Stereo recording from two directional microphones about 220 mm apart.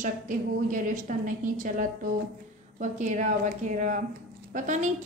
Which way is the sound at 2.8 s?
35° right (ahead or behind).